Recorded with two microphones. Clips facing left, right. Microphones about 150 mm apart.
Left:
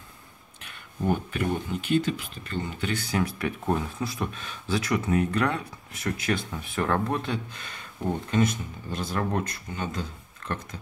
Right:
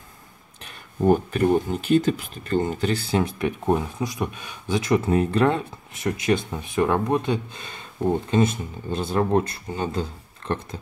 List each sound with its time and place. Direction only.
0.6 s speech: 40° right (ahead or behind)